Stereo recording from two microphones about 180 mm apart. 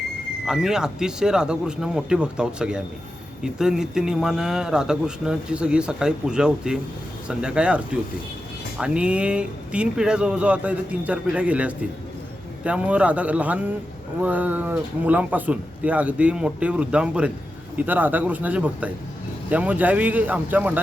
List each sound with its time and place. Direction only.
0.4 s a man's voice: 5° right (ahead or behind)
8.8 s speech: 5° right (ahead or behind)